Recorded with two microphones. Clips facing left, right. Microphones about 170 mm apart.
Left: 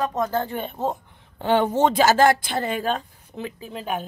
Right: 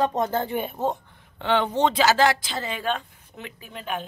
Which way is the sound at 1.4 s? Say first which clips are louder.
Left 3 dB; 40° left (ahead or behind).